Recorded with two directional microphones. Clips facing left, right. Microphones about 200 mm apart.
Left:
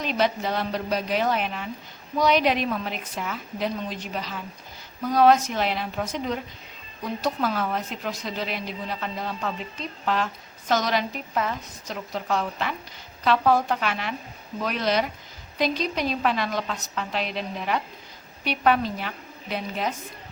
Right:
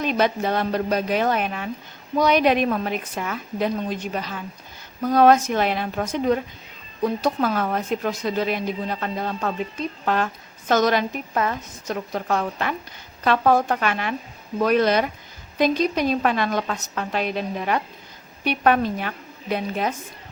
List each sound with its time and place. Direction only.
0.0 s a woman's voice: 50° right (ahead or behind)
10.7 s a woman's voice: 50° right (ahead or behind)